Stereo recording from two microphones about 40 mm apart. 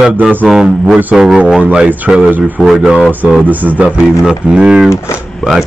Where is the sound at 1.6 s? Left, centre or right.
Right.